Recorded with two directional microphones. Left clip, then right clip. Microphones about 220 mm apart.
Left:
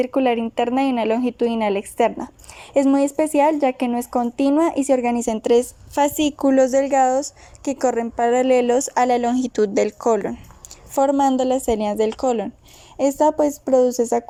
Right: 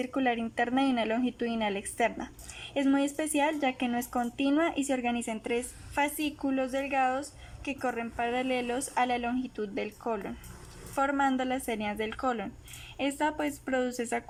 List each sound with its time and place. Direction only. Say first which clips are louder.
0.0 s speech: left 11 dB; 10° left (ahead or behind)
5.2 s a woman's voice: left 15 dB; 35° left (ahead or behind)
7.6 s a woman's voice: left 13 dB; 40° left (ahead or behind)
7.9 s a woman's voice: left 13 dB; 30° left (ahead or behind)
13.0 s speech: left 13 dB; 20° left (ahead or behind)